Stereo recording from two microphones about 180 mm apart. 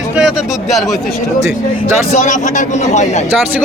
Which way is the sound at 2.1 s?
40° left (ahead or behind).